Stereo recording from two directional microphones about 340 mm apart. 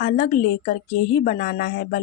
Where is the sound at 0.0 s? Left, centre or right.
Left.